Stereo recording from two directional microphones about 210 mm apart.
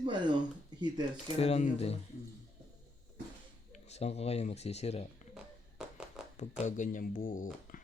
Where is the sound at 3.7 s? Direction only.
30° left (ahead or behind).